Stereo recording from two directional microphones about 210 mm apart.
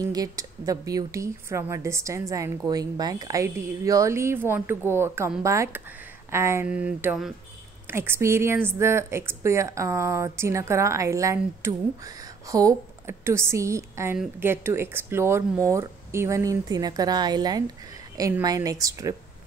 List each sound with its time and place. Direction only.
0.0 s speech: 15° right (ahead or behind)